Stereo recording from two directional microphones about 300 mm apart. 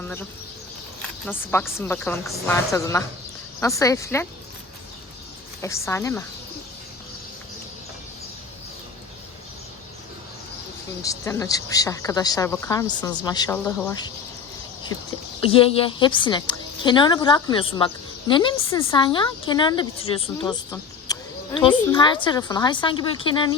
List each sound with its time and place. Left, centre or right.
1.3 s a woman's voice: centre
5.6 s a woman's voice: centre
11.0 s a woman's voice: centre
15.4 s a woman's voice: centre